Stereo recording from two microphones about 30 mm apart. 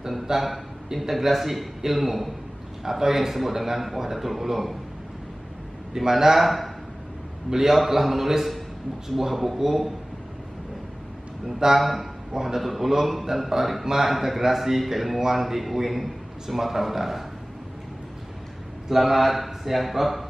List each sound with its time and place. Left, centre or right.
0.3 s a man's voice: centre
5.9 s a man's voice: centre
6.3 s a man's voice: centre
11.4 s a man's voice: centre
11.8 s speech: centre
12.3 s a man's voice: centre
12.6 s a man's voice: centre
18.9 s speech: centre